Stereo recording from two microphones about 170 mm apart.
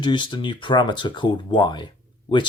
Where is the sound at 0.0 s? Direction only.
25° left (ahead or behind).